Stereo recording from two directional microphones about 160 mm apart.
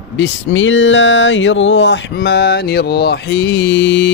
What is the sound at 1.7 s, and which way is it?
Mantra, 90° left.